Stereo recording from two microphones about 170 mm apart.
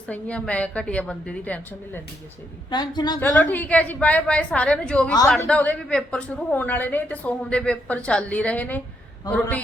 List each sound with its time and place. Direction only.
0.1 s a woman's voice: 5° left (ahead or behind)
2.6 s a woman's voice: 25° left (ahead or behind)
3.2 s a woman's voice: 10° left (ahead or behind)